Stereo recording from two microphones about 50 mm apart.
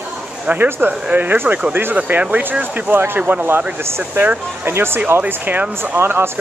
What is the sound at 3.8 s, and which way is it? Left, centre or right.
Speech, right.